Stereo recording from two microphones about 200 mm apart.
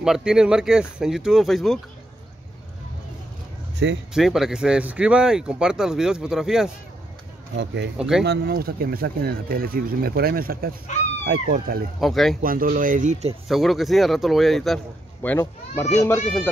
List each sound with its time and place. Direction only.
0.0 s speech: 5° right (ahead or behind)
4.1 s speech: centre (ahead or behind)
7.5 s speech: 60° right (ahead or behind)
10.9 s speech: 35° left (ahead or behind)
11.2 s speech: 50° right (ahead or behind)
12.0 s speech: centre (ahead or behind)
12.4 s speech: 45° right (ahead or behind)
13.5 s speech: centre (ahead or behind)
15.2 s speech: 10° left (ahead or behind)